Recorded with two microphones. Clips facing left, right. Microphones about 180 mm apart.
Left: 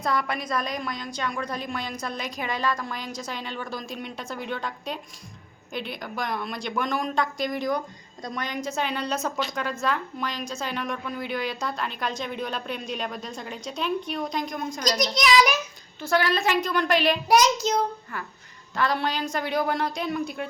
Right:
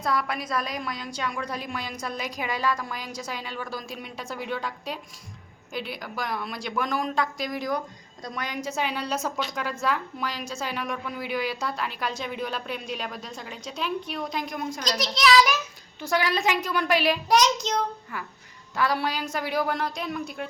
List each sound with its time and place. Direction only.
0.0 s a woman's voice: 5° right (ahead or behind)
14.8 s a child's voice: 15° left (ahead or behind)
16.0 s a woman's voice: 15° right (ahead or behind)
17.2 s a child's voice: 5° left (ahead or behind)
18.8 s speech: 10° right (ahead or behind)